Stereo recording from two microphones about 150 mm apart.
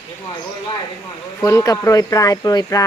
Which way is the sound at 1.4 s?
20° left (ahead or behind).